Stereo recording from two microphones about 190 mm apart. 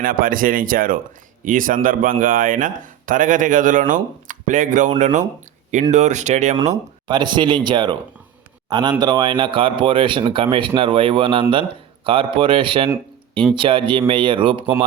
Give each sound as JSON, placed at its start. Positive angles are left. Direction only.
{"t": 0.0, "sound": "a man's voice", "side_deg": -50}
{"t": 7.1, "sound": "speech", "side_deg": -25}